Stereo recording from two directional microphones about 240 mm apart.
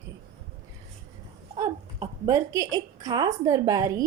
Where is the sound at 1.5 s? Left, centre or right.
Centre.